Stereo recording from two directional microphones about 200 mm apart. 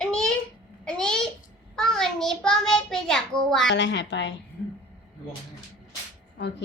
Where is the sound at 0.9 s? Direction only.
5° left (ahead or behind).